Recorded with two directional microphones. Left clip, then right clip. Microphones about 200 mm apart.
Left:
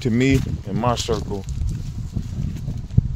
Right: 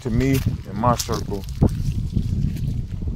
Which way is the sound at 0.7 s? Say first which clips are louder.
Right 1 dB; 30° left (ahead or behind).